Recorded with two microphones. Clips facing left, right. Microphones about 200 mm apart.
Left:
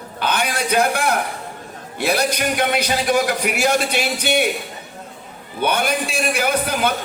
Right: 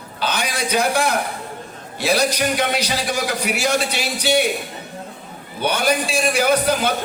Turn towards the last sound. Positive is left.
turn(degrees=55)  # may be behind; listen again after turning